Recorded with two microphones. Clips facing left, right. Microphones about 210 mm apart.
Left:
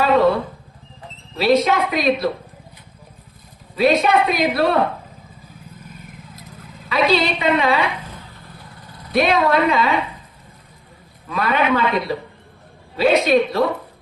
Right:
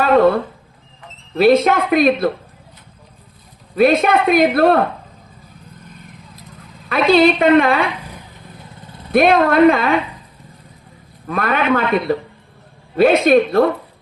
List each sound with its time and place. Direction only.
0.0 s a sound: 55° right (ahead or behind)
1.4 s a woman's voice: 50° right (ahead or behind)
3.8 s a woman's voice: 50° right (ahead or behind)
6.8 s a woman's voice: 55° right (ahead or behind)
9.1 s a woman's voice: 55° right (ahead or behind)
11.3 s a woman's voice: 55° right (ahead or behind)